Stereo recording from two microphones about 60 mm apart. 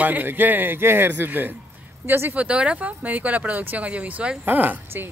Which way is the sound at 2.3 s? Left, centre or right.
Right.